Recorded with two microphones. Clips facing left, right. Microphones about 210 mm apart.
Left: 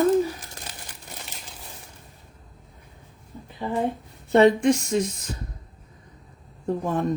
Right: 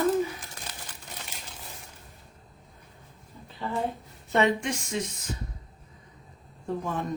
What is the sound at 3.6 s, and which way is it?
Speech, 15° left (ahead or behind).